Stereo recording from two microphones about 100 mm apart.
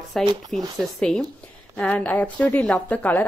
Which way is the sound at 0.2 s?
5° left (ahead or behind).